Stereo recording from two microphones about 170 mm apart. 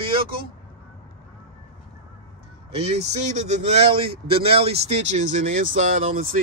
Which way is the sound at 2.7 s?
35° right (ahead or behind).